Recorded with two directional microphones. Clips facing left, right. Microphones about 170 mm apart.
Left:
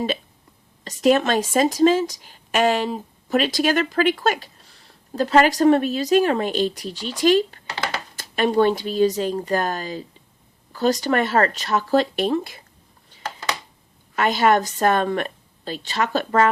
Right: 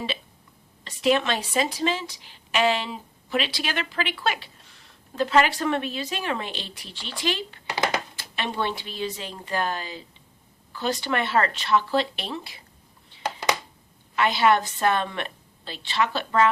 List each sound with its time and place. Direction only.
0.9 s speech: 45° left (ahead or behind)
13.2 s a sound: 15° right (ahead or behind)
14.2 s speech: 45° left (ahead or behind)